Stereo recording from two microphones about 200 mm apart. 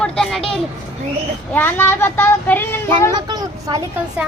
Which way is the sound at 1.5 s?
10° left (ahead or behind).